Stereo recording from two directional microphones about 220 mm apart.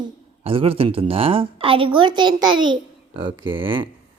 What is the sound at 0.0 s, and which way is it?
A woman's voice, 25° right (ahead or behind).